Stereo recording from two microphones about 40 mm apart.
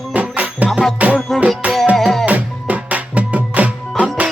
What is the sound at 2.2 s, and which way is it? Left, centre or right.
Music, right.